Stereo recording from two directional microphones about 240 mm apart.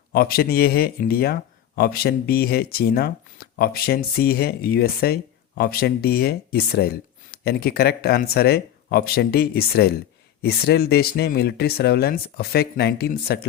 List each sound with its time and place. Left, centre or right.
0.1 s speech: left